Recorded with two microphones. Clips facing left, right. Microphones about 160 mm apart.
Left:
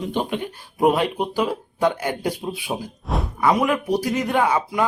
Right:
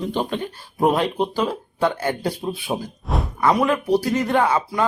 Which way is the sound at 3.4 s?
15° left (ahead or behind).